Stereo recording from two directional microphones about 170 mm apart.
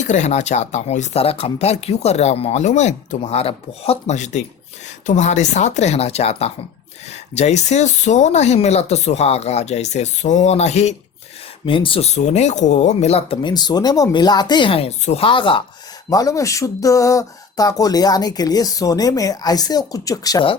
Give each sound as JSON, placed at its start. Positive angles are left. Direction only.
{"t": 0.0, "sound": "speech", "side_deg": 45}